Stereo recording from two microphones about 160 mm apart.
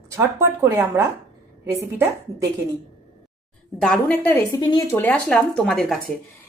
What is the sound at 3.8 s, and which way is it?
Speech, 5° left (ahead or behind).